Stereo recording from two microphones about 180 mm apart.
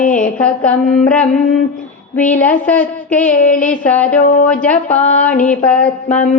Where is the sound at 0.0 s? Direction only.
45° left (ahead or behind).